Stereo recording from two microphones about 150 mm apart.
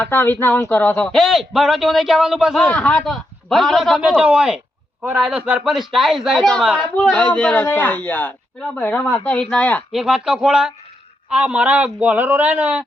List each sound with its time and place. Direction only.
0.0 s speech: 15° left (ahead or behind); by 6.8 s 5° right (ahead or behind)
6.9 s speech: 5° left (ahead or behind)
9.9 s a man's voice: 5° right (ahead or behind)